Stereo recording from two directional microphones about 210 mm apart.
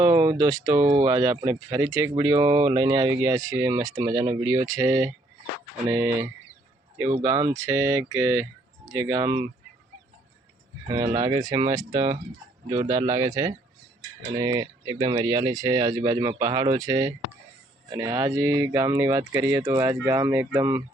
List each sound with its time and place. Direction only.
0.0 s speech: 15° right (ahead or behind)
10.8 s speech: 15° right (ahead or behind)